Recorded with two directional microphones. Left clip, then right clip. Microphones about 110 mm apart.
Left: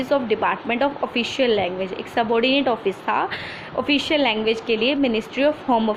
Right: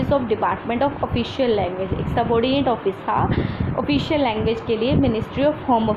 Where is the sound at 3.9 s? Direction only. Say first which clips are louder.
Left 2 dB; 55° left (ahead or behind).